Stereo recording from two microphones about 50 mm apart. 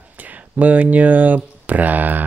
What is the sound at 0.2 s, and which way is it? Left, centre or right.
Speech, right.